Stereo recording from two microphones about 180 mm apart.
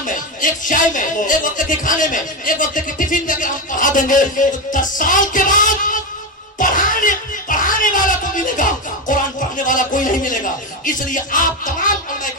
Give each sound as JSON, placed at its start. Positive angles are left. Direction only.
{"t": 0.0, "sound": "speech", "side_deg": 45}
{"t": 6.6, "sound": "music", "side_deg": 45}
{"t": 9.6, "sound": "speech", "side_deg": 45}